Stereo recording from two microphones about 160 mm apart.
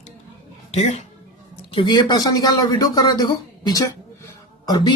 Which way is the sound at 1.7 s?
30° left (ahead or behind).